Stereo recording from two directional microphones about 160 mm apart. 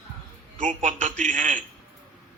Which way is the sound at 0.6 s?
55° right (ahead or behind).